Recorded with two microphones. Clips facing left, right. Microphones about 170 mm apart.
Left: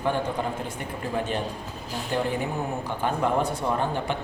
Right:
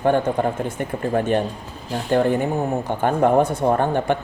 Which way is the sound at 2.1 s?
55° right (ahead or behind).